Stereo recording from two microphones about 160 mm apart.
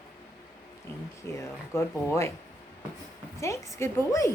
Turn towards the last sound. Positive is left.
turn(degrees=20)  # may be behind; listen again after turning